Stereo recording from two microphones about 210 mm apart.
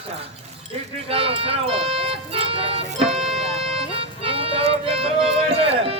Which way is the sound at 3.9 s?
25° right (ahead or behind).